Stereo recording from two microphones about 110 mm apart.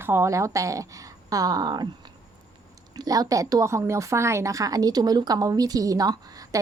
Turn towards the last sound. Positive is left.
turn(degrees=-35)  # may be behind; listen again after turning